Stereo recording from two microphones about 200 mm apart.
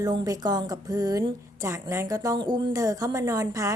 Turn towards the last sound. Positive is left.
turn(degrees=-15)  # may be behind; listen again after turning